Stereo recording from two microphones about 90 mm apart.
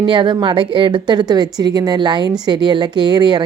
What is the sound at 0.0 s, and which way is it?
A woman's voice, 65° right (ahead or behind).